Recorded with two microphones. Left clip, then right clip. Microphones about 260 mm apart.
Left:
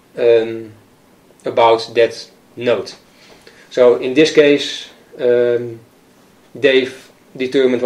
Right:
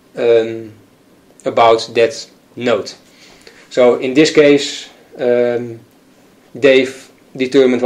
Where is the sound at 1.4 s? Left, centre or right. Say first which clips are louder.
Right 2 dB; right.